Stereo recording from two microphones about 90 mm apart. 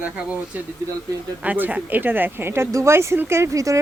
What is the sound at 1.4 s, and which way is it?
Speech, 20° right (ahead or behind).